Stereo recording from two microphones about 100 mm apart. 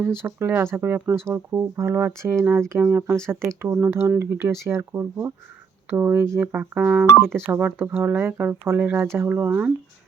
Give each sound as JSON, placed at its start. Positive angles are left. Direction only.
{"t": 0.0, "sound": "speech", "side_deg": -25}